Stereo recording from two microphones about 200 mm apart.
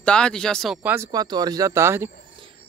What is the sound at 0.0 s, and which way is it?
Speech, 5° left (ahead or behind).